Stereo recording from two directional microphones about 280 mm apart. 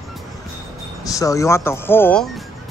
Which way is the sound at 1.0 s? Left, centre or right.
Centre.